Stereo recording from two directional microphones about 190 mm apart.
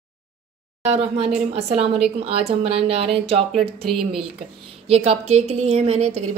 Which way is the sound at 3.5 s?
Centre (ahead or behind).